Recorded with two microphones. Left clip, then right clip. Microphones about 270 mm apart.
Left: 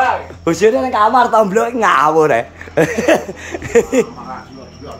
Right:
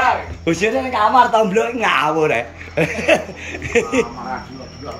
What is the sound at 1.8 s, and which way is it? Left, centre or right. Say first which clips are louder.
Speech: left 7 dB; left.